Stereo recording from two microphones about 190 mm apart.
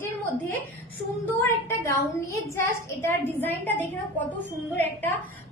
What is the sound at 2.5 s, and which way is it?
A woman's voice, 15° left (ahead or behind).